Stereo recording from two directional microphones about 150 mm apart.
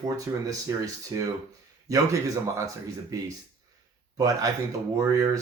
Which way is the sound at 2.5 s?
20° right (ahead or behind).